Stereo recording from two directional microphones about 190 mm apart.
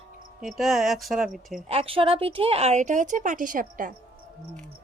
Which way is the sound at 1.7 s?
30° right (ahead or behind).